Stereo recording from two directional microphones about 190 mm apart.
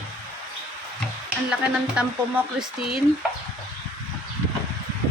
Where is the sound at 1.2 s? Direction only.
5° right (ahead or behind).